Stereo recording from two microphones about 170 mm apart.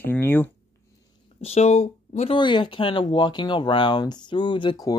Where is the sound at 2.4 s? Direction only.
30° left (ahead or behind).